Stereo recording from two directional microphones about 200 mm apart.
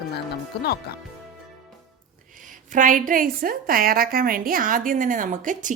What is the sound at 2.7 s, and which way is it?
A woman's voice, 40° right (ahead or behind).